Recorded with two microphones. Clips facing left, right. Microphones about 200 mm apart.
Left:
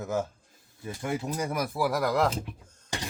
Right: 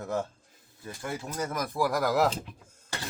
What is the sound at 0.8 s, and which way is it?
Speech, 20° left (ahead or behind).